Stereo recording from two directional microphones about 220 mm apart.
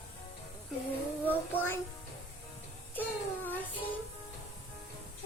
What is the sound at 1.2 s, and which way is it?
Child singing, 10° left (ahead or behind).